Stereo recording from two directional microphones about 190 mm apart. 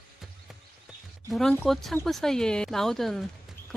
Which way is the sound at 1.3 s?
Centre (ahead or behind).